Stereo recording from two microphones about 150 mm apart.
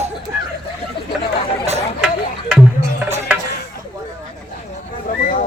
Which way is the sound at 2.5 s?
5° right (ahead or behind).